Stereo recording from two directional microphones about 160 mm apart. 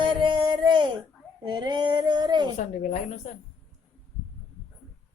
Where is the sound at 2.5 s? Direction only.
50° left (ahead or behind).